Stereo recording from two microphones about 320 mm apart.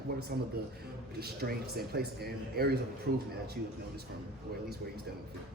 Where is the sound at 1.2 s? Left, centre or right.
Right.